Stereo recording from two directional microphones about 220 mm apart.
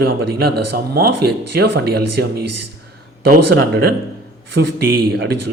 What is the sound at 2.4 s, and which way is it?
Speech, 90° right.